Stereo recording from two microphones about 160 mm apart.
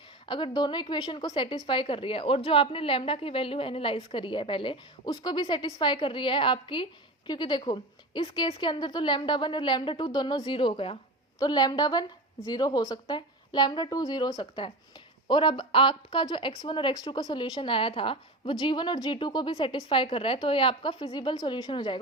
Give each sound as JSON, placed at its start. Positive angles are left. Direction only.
{"t": 0.3, "sound": "a woman's voice", "side_deg": 30}